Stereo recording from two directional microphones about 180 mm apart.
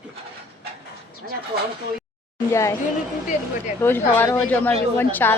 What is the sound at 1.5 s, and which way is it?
Speech, 60° right (ahead or behind).